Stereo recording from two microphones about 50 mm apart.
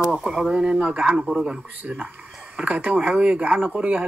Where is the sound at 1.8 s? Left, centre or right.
Right.